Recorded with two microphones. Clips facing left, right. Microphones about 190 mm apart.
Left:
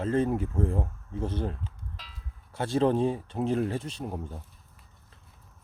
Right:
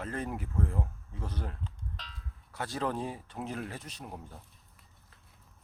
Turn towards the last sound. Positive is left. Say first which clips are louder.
# left 10 dB
turn(degrees=30)  # may be behind; listen again after turning